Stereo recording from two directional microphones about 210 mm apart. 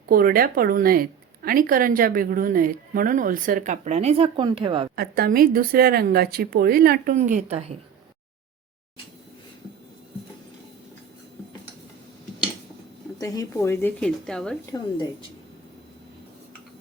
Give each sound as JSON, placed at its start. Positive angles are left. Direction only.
{"t": 0.1, "sound": "speech", "side_deg": -45}
{"t": 4.9, "sound": "a woman's voice", "side_deg": -45}
{"t": 13.1, "sound": "a woman's voice", "side_deg": 15}